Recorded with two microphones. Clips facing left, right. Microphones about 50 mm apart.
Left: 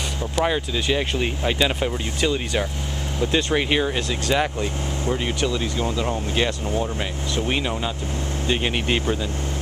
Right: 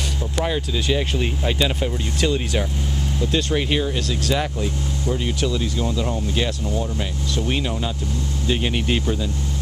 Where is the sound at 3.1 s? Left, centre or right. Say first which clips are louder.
Left 1 dB; centre.